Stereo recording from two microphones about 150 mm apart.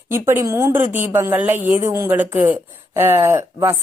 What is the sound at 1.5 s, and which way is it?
Speech, 55° right (ahead or behind).